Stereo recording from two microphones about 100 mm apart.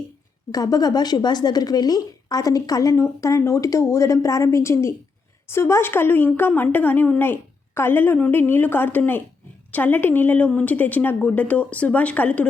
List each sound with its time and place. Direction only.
0.5 s a woman's voice: 40° left (ahead or behind); by 12.5 s 15° left (ahead or behind)